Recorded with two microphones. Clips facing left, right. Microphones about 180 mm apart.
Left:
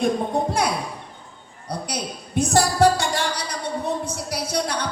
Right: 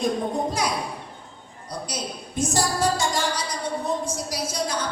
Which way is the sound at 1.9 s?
65° left (ahead or behind).